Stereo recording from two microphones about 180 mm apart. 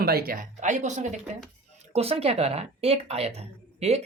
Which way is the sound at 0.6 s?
40° right (ahead or behind).